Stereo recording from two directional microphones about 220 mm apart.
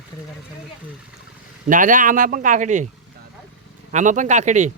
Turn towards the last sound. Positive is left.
turn(degrees=-35)  # may be behind; listen again after turning